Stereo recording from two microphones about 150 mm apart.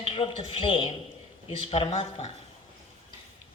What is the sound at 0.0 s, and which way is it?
A woman's voice, 35° left (ahead or behind).